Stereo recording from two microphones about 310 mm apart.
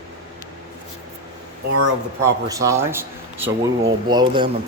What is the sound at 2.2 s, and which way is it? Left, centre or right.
A man's voice, centre.